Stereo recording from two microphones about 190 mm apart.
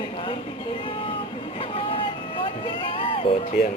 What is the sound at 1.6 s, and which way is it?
Vehicle, 30° left (ahead or behind).